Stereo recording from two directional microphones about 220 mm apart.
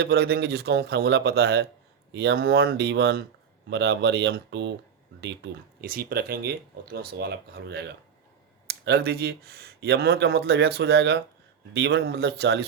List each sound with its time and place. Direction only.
0.0 s speech: 45° right (ahead or behind)